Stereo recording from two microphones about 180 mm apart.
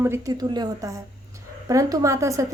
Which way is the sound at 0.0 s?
15° right (ahead or behind).